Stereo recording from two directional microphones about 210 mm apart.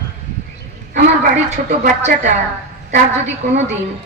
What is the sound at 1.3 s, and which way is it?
A woman's voice, 35° right (ahead or behind).